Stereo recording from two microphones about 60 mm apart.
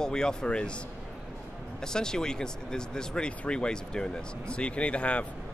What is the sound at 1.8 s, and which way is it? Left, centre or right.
Speech, centre.